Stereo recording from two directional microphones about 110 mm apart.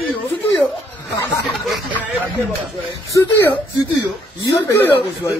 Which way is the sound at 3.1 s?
20° left (ahead or behind).